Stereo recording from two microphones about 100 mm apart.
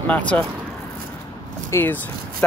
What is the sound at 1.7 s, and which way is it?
Speech, 20° left (ahead or behind).